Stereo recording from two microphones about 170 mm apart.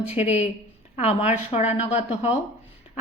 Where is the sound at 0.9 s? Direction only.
40° left (ahead or behind).